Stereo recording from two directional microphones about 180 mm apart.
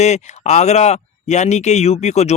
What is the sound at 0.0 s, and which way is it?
Speech, 40° left (ahead or behind).